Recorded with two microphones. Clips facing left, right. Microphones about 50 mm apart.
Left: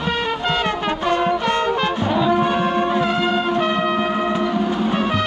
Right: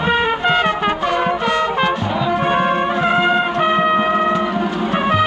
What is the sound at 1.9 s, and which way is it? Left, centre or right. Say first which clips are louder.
Music: left 1 dB; right.